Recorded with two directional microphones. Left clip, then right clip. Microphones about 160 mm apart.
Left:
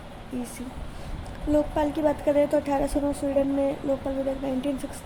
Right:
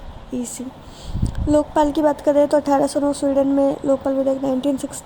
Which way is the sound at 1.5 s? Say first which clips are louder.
Right 7 dB; 45° right (ahead or behind).